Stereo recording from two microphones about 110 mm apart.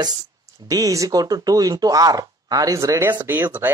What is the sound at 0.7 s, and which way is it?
Speech, 30° right (ahead or behind).